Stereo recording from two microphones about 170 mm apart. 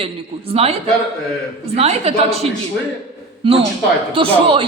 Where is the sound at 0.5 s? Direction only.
35° right (ahead or behind).